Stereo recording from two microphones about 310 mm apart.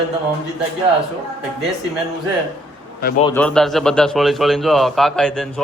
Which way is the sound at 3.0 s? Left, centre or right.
Left.